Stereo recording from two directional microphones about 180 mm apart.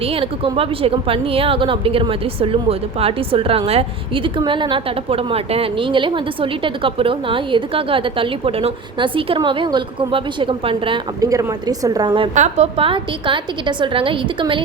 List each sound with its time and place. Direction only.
0.0 s a woman's voice: 30° right (ahead or behind)
12.3 s a woman's voice: 40° right (ahead or behind)